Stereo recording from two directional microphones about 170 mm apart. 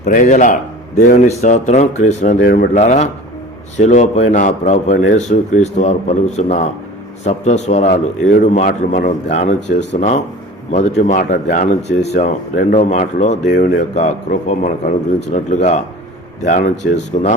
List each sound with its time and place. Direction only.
0.0 s a man's voice: 50° left (ahead or behind)